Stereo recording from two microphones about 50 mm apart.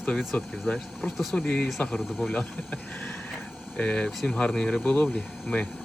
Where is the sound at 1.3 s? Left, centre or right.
Left.